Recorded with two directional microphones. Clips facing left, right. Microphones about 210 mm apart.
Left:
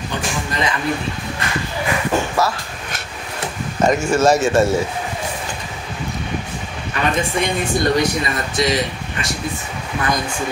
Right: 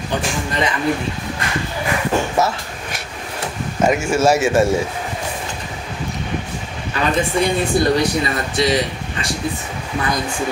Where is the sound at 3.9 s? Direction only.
10° right (ahead or behind).